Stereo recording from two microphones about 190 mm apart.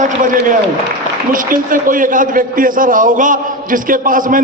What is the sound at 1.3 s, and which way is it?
A man's voice, 45° right (ahead or behind).